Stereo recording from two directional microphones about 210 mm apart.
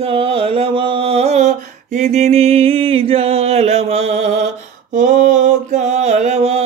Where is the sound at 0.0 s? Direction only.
25° right (ahead or behind).